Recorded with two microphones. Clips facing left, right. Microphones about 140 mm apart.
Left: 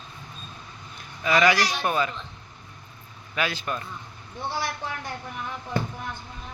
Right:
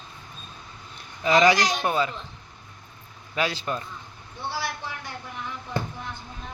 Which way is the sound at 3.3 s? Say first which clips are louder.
Right 1 dB; 30° right (ahead or behind).